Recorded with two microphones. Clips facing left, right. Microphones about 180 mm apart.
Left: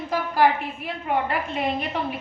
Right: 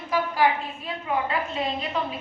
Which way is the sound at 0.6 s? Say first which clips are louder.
Left 2 dB; 70° left (ahead or behind).